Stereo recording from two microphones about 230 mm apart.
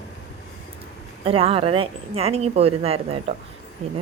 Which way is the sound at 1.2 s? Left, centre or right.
Right.